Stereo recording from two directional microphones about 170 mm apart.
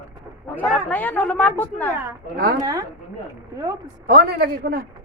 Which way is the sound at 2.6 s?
20° right (ahead or behind).